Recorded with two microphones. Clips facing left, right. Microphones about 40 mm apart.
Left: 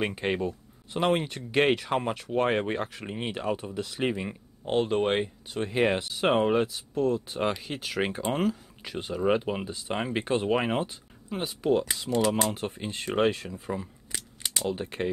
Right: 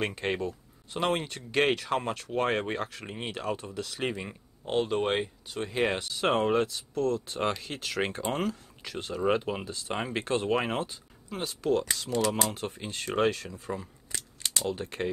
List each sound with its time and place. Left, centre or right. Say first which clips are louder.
0.0 s speech: left 2 dB; centre
13.7 s a sound: left 2 dB; centre
14.7 s speech: left 4 dB; centre